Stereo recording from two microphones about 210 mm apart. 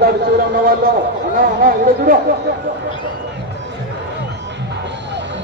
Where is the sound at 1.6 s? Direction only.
45° right (ahead or behind).